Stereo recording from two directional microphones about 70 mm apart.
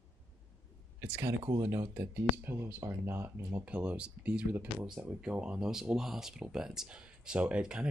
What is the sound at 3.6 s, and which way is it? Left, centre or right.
Speech, centre.